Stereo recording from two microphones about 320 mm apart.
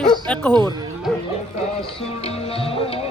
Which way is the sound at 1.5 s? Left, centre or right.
Centre.